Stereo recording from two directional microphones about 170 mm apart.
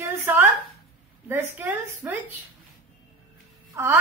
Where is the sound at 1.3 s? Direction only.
10° right (ahead or behind).